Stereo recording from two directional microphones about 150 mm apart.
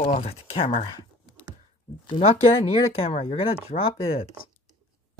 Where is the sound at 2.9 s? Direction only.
40° left (ahead or behind).